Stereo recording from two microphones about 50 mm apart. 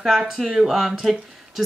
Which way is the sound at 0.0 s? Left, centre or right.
Centre.